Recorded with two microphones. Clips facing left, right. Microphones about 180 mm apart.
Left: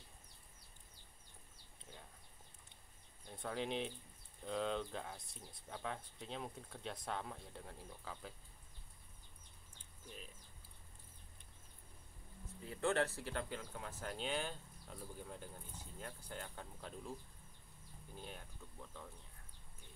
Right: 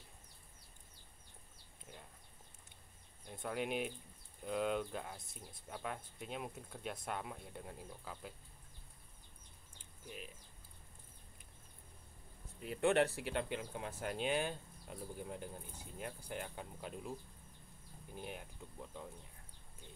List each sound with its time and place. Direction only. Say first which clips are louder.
3.3 s speech: right 2 dB; 10° right (ahead or behind)
10.0 s speech: right 4 dB; 10° right (ahead or behind)
12.8 s speech: right 4 dB; 20° right (ahead or behind)
18.1 s speech: right 5 dB; 15° right (ahead or behind)